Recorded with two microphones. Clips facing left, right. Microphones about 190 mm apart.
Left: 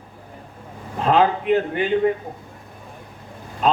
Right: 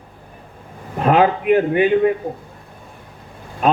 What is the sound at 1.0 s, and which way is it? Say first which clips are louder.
Speech: right 3 dB; 60° right (ahead or behind).